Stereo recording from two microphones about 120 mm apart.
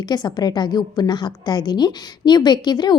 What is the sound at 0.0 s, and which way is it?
A woman's voice, 35° left (ahead or behind).